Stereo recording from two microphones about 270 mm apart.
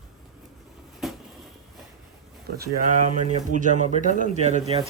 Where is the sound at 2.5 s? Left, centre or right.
Right.